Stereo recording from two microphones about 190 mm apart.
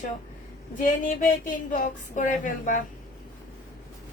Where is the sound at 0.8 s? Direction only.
45° left (ahead or behind).